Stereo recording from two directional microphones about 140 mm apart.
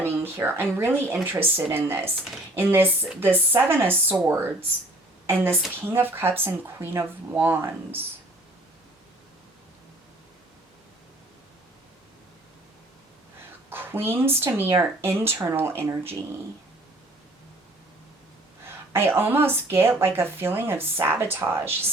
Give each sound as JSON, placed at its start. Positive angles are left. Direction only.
{"t": 0.0, "sound": "a sound", "side_deg": -15}
{"t": 0.7, "sound": "a woman's voice", "side_deg": -15}
{"t": 13.7, "sound": "speech", "side_deg": -15}
{"t": 18.9, "sound": "speech", "side_deg": -15}